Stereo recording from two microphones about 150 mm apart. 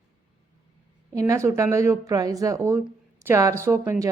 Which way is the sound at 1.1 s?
20° right (ahead or behind).